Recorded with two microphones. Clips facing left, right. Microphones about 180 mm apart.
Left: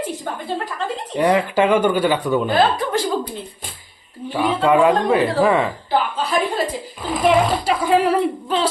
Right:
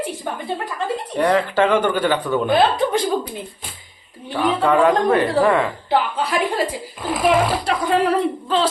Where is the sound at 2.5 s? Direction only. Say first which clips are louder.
Right 4 dB; 15° right (ahead or behind).